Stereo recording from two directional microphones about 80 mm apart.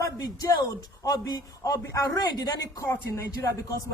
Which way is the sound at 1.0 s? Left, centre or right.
Left.